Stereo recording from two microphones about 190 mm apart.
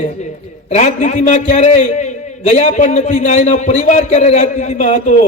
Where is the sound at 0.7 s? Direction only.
35° left (ahead or behind).